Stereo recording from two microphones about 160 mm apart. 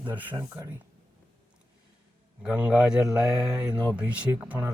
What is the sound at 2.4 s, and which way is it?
Speech, 5° right (ahead or behind).